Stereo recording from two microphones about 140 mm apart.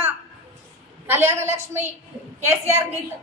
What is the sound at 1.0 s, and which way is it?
A woman's voice, 15° right (ahead or behind).